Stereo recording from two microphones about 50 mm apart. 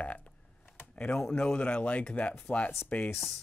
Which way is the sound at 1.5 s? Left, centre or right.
Left.